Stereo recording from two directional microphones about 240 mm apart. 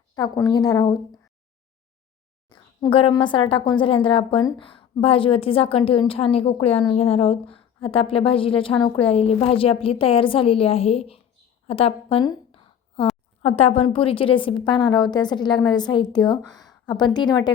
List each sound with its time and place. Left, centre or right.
0.1 s a woman's voice: centre
2.5 s a woman's voice: centre
11.7 s a sound: left
13.4 s a woman's voice: left